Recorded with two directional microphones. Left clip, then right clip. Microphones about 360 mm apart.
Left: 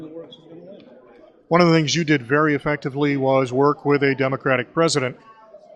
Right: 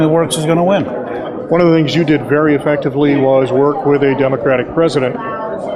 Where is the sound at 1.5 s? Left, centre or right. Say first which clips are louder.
Right 5 dB; left.